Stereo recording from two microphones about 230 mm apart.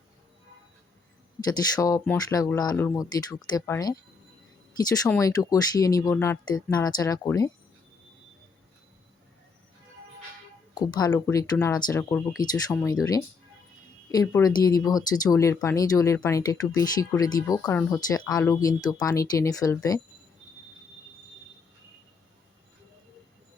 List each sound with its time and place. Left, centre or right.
1.5 s speech: centre
10.8 s speech: centre